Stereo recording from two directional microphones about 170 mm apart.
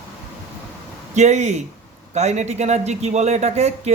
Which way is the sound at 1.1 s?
40° right (ahead or behind).